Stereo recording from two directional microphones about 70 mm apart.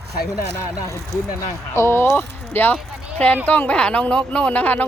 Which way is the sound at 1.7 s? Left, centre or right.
Left.